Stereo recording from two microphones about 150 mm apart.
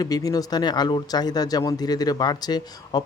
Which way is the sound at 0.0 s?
25° left (ahead or behind).